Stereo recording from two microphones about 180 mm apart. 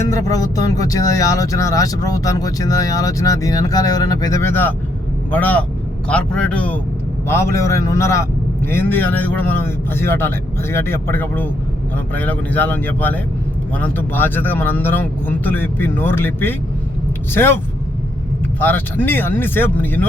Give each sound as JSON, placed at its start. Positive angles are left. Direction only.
{"t": 0.1, "sound": "a man's voice", "side_deg": 20}
{"t": 18.6, "sound": "a man's voice", "side_deg": 10}